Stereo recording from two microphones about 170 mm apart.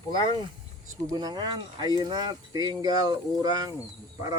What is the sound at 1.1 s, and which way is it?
Speech, 25° right (ahead or behind).